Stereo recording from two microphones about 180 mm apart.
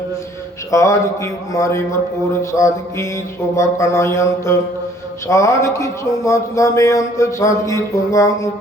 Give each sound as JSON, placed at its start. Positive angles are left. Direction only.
{"t": 0.7, "sound": "speech", "side_deg": 15}